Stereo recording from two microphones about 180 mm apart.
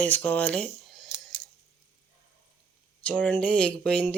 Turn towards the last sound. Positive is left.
turn(degrees=5)  # may be behind; listen again after turning